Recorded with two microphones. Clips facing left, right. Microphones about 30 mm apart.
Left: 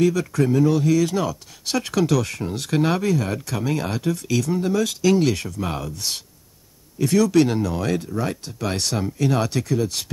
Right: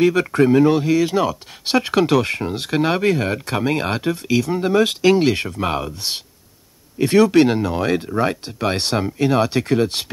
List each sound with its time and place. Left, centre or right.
0.0 s speech: right
3.0 s speech: right
9.6 s speech: right